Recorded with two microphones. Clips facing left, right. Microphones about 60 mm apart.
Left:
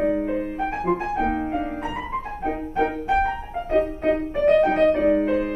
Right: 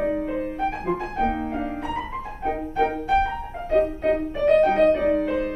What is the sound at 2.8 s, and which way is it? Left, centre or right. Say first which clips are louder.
Music: even; centre.